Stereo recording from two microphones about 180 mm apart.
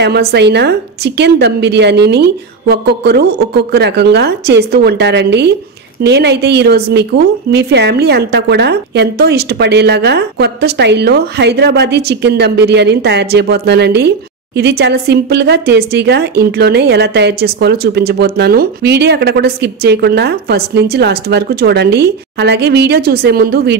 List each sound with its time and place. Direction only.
0.0 s a woman's voice: 65° right (ahead or behind)